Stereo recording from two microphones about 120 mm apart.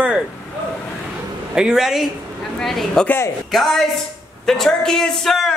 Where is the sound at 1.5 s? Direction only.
5° right (ahead or behind).